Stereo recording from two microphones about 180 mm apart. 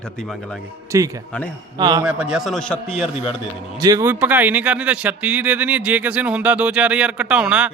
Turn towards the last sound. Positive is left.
turn(degrees=-5)  # may be behind; listen again after turning